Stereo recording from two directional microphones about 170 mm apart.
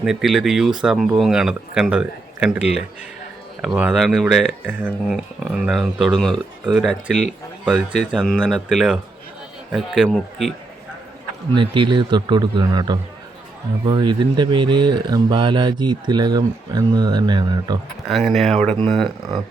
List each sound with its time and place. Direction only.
0.0 s speech: centre (ahead or behind)
11.5 s speech: 30° right (ahead or behind)
18.3 s speech: centre (ahead or behind)